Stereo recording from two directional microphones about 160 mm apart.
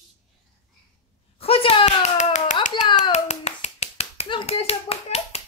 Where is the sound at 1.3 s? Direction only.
35° left (ahead or behind).